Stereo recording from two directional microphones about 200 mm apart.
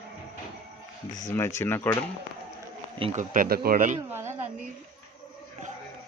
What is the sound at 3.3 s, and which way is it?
Speech, 45° right (ahead or behind).